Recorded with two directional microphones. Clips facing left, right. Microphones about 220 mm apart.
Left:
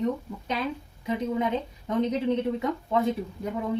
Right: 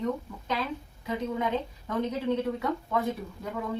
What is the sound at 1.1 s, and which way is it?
A woman's voice, 20° left (ahead or behind).